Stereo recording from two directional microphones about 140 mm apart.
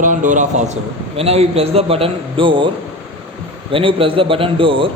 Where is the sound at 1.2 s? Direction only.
45° right (ahead or behind).